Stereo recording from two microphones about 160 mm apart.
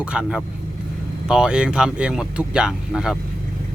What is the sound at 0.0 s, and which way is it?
Speech, 5° right (ahead or behind).